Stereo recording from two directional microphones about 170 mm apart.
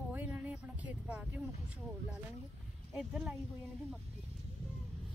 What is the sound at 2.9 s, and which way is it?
Speech, 5° right (ahead or behind).